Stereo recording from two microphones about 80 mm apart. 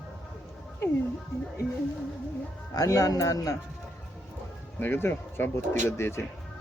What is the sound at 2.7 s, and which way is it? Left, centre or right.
Speech, left.